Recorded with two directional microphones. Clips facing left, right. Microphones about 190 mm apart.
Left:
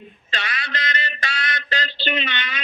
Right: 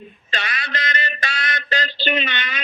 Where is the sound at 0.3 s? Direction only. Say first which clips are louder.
Right 1 dB; 45° right (ahead or behind).